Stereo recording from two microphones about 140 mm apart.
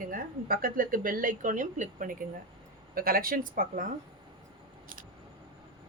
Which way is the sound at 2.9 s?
90° right.